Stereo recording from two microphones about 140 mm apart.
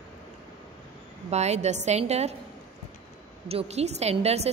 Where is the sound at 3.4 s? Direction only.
50° right (ahead or behind).